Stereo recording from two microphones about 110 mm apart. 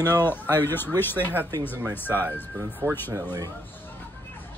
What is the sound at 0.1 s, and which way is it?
Speech, 20° left (ahead or behind).